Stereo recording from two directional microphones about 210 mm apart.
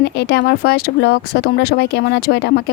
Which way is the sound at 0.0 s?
50° left (ahead or behind).